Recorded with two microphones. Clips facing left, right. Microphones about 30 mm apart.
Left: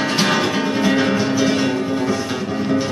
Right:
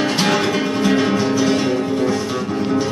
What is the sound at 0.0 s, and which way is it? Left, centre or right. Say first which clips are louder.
Music: right 1 dB; centre.